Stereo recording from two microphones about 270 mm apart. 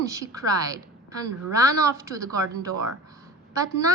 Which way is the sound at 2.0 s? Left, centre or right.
Centre.